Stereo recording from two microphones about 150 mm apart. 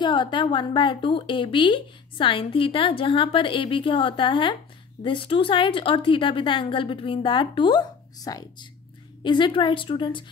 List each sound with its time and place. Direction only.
0.0 s a woman's voice: 30° left (ahead or behind)